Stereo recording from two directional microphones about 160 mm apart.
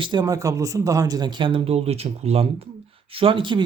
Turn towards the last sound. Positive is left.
turn(degrees=-30)  # may be behind; listen again after turning